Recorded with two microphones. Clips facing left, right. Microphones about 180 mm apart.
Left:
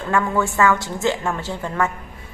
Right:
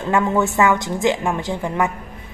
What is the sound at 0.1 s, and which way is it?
A woman's voice, 20° right (ahead or behind).